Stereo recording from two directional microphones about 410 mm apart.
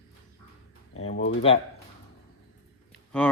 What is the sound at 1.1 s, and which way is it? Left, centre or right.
Speech, left.